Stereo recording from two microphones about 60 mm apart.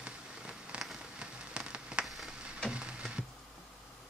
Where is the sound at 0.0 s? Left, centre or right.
Centre.